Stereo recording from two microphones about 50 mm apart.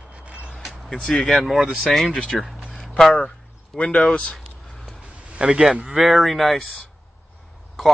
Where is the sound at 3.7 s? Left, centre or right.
Centre.